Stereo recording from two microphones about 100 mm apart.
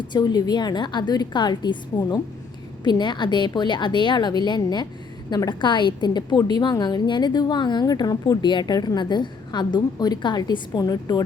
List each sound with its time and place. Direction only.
0.1 s a woman's voice: 45° left (ahead or behind)